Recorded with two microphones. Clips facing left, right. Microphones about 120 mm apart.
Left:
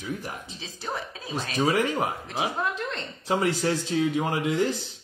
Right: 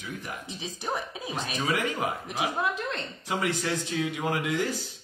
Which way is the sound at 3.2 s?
35° left (ahead or behind).